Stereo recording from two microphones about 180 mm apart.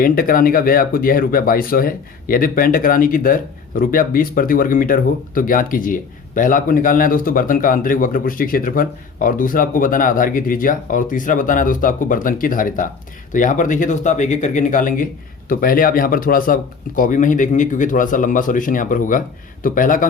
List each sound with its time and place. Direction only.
0.0 s speech: 50° left (ahead or behind)